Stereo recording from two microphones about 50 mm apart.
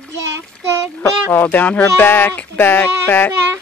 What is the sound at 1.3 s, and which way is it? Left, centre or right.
Speech, left.